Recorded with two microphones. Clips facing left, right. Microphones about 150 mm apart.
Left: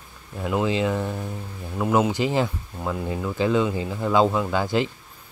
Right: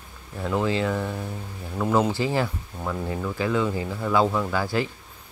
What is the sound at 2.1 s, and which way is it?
Speech, 20° left (ahead or behind).